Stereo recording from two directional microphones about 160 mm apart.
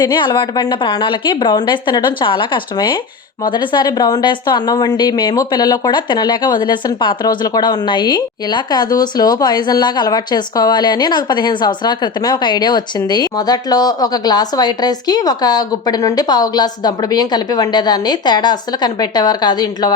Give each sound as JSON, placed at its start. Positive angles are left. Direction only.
{"t": 0.0, "sound": "a woman's voice", "side_deg": 30}